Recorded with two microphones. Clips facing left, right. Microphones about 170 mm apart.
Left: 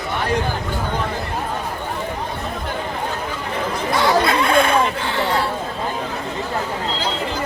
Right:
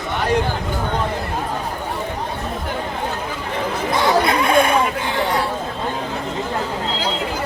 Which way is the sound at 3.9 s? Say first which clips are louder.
Even; 20° right (ahead or behind).